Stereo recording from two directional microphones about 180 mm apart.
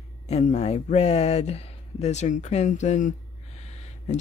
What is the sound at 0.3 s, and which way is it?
Speech, 35° left (ahead or behind).